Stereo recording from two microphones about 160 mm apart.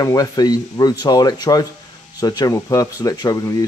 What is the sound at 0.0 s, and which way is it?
Speech, 20° left (ahead or behind).